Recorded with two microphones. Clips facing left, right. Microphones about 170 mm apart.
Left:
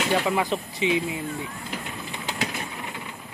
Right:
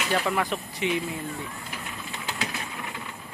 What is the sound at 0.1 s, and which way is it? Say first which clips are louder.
Speech: left 1 dB; 15° left (ahead or behind).